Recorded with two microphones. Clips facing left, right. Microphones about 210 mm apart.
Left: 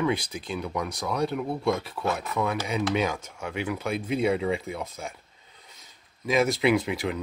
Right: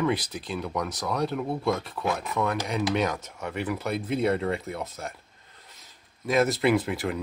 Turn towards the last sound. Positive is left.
turn(degrees=0)  # may be behind; listen again after turning